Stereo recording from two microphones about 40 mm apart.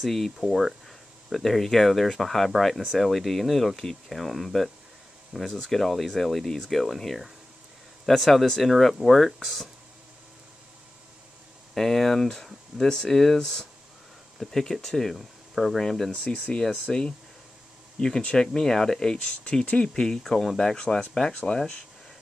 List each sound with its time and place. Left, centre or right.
0.0 s speech: centre
11.7 s speech: centre
15.8 s speech: centre